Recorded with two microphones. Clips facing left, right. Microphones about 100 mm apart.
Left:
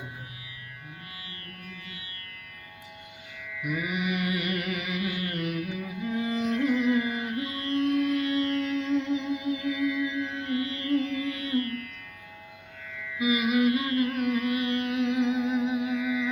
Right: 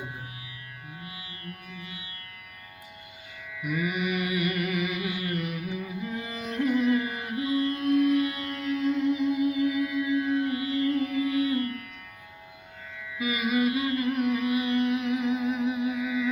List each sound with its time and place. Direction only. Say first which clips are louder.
1.0 s music: right 3 dB; 10° right (ahead or behind)
3.5 s music: even; 10° right (ahead or behind)
3.9 s carnatic music: right 1 dB; 10° right (ahead or behind)
6.6 s music: right 3 dB; 20° right (ahead or behind)
9.0 s music: right 4 dB; 25° left (ahead or behind)
9.6 s music: right 1 dB; 20° right (ahead or behind)
13.1 s music: left 3 dB; 10° left (ahead or behind)
13.7 s music: left 1 dB; 10° right (ahead or behind)
15.1 s music: left 1 dB; 20° left (ahead or behind)
15.9 s humming: left 1 dB; 15° right (ahead or behind)